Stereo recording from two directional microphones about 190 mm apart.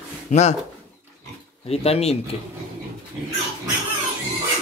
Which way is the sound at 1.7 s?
30° left (ahead or behind).